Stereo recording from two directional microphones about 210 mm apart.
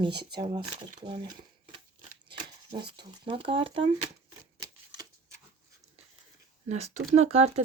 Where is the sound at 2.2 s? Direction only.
25° right (ahead or behind).